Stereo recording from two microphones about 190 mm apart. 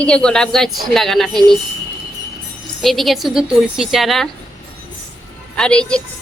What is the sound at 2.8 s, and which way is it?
A woman's voice, centre (ahead or behind).